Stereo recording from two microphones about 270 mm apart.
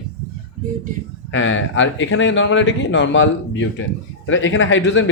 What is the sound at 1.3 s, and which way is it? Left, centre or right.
A man's voice, left.